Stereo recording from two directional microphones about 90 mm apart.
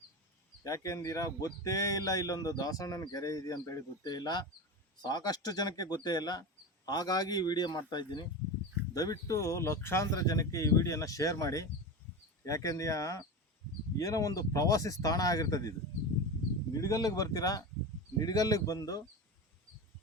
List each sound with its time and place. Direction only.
0.6 s a man's voice: 40° left (ahead or behind)
9.0 s speech: 40° left (ahead or behind)
16.8 s a man's voice: 40° left (ahead or behind)